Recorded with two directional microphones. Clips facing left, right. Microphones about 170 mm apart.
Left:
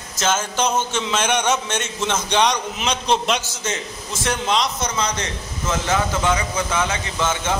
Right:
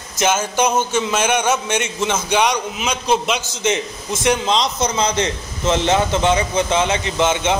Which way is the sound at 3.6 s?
20° right (ahead or behind).